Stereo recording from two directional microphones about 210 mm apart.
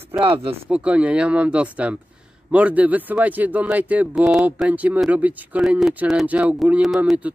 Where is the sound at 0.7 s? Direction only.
5° right (ahead or behind).